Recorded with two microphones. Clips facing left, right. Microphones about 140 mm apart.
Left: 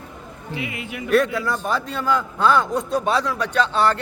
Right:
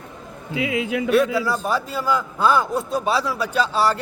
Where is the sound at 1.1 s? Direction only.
5° right (ahead or behind).